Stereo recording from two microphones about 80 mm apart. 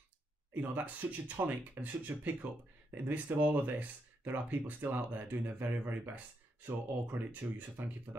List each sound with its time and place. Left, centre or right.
0.6 s speech: right